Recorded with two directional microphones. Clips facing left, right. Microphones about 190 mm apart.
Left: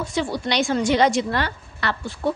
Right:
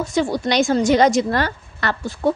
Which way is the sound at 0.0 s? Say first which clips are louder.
Right 5 dB; 45° right (ahead or behind).